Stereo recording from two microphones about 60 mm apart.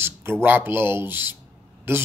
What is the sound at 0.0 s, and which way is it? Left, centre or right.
Speech, right.